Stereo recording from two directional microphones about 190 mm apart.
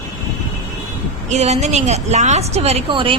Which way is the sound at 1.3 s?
35° right (ahead or behind).